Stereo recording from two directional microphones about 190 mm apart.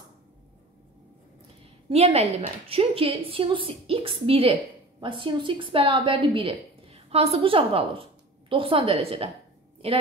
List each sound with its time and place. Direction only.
1.9 s a woman's voice: 30° right (ahead or behind)